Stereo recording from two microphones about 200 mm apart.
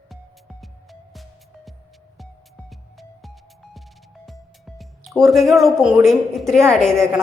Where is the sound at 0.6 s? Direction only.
Centre (ahead or behind).